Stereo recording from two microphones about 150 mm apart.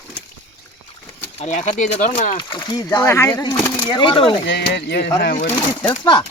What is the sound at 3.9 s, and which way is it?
Speech, 35° left (ahead or behind).